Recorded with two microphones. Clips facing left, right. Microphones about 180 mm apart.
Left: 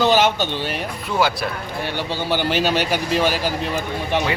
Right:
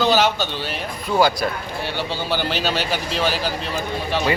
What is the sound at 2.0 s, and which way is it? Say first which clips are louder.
Speech: left 2 dB; 15° left (ahead or behind).